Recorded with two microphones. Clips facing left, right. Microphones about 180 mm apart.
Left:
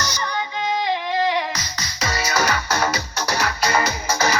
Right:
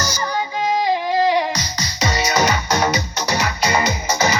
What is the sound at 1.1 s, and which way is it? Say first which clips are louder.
Music: right 4 dB; 30° right (ahead or behind).